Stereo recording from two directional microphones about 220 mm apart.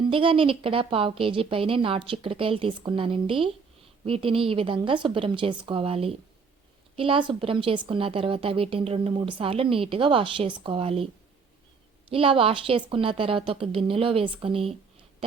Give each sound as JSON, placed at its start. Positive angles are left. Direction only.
{"t": 0.0, "sound": "a woman's voice", "side_deg": -25}